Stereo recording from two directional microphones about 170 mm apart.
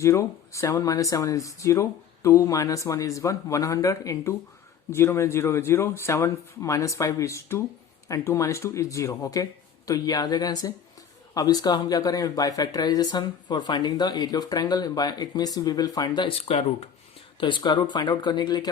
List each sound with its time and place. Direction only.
0.0 s speech: 15° left (ahead or behind)